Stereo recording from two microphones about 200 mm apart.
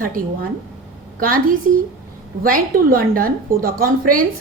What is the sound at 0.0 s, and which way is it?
A woman's voice, 45° right (ahead or behind).